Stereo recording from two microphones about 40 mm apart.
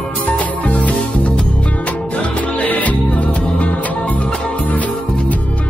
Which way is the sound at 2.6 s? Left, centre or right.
Left.